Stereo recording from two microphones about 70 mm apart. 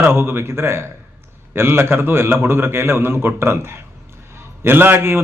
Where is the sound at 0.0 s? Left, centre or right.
Right.